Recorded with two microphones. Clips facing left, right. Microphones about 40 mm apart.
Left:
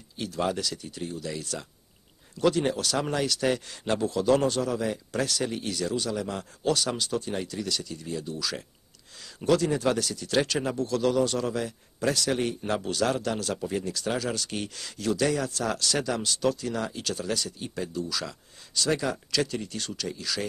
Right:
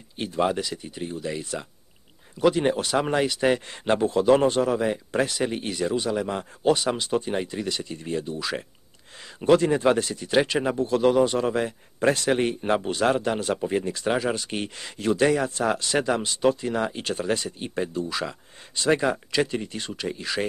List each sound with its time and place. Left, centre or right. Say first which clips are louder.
0.2 s speech: right 4 dB; right